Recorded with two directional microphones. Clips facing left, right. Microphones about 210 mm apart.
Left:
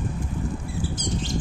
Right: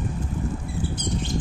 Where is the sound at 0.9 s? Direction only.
55° right (ahead or behind).